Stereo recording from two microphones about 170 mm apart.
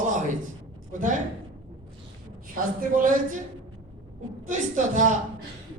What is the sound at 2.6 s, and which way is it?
Speech, 55° right (ahead or behind).